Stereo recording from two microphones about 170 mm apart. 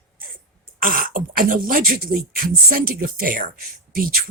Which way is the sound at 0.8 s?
55° right (ahead or behind).